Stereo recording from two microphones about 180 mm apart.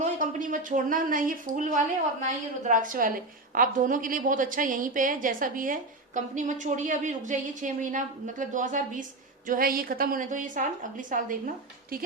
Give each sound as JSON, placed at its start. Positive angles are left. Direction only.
{"t": 0.0, "sound": "a woman's voice", "side_deg": -45}